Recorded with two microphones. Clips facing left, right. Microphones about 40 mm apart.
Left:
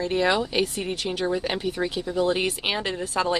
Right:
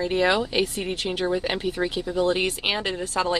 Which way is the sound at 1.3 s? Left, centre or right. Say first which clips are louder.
Right 1 dB; centre.